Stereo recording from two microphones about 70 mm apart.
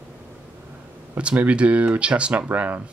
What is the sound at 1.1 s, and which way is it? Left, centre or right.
Speech, centre.